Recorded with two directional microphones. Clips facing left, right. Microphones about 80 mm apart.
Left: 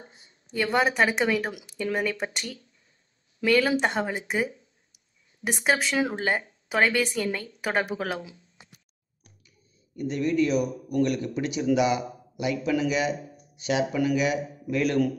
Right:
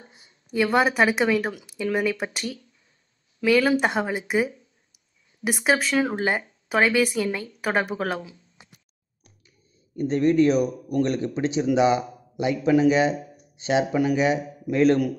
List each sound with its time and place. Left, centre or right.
0.7 s a woman's voice: centre
9.9 s a man's voice: right